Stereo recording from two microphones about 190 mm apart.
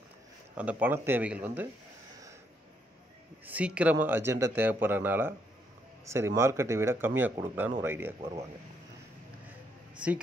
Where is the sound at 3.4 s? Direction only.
5° right (ahead or behind).